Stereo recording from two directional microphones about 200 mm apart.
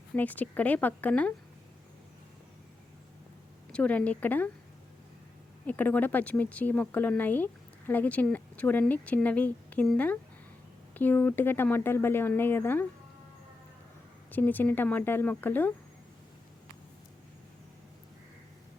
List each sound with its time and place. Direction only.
0.2 s speech: 10° left (ahead or behind)
3.7 s speech: 5° left (ahead or behind)
5.6 s speech: 10° left (ahead or behind)
14.3 s speech: 10° left (ahead or behind)